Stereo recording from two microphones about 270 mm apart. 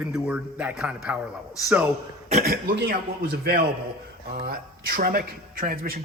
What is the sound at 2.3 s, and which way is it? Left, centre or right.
Speech, right.